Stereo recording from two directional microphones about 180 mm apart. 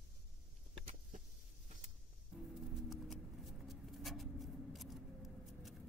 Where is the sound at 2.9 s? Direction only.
Centre (ahead or behind).